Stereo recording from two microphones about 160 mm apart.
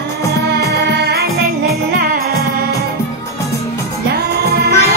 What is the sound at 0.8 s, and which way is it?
Music, 90° right.